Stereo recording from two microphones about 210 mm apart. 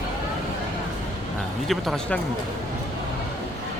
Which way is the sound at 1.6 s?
Centre (ahead or behind).